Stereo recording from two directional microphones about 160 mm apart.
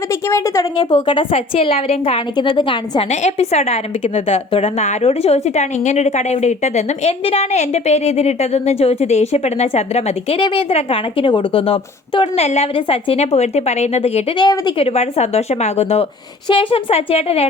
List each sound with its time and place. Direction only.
0.1 s a woman's voice: 20° left (ahead or behind)
3.1 s a woman's voice: 45° left (ahead or behind)
14.3 s speech: 25° left (ahead or behind)
14.8 s a woman's voice: 40° left (ahead or behind)